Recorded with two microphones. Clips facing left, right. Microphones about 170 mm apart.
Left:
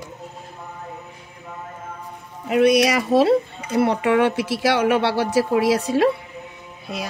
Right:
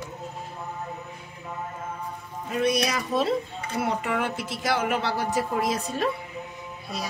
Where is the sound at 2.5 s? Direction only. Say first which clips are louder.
Left 9 dB; 75° left (ahead or behind).